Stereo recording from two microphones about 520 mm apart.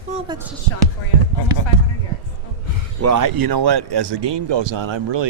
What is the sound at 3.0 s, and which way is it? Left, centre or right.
Speech, right.